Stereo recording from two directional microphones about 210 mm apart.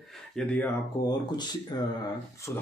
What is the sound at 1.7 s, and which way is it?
Speech, 20° left (ahead or behind).